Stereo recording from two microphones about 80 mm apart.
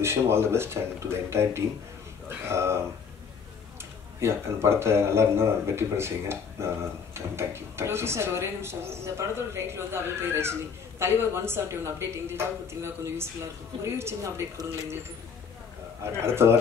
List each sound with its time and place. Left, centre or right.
0.0 s speech: right
4.2 s speech: right
16.0 s speech: right